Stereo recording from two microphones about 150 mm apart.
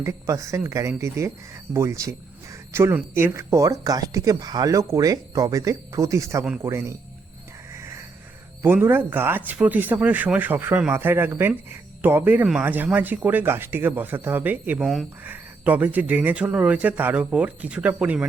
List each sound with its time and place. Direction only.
0.0 s speech: 20° right (ahead or behind)
7.7 s a sound: 20° right (ahead or behind)
8.6 s speech: 15° right (ahead or behind)